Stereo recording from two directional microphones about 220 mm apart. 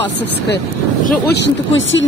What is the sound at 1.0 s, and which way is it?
Speech, 50° left (ahead or behind).